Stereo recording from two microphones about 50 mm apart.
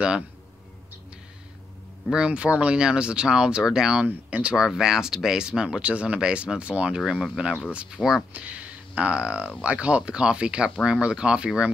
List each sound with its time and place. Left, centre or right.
2.1 s speech: right
4.0 s speech: right
4.6 s speech: centre
8.0 s speech: left
8.4 s speech: right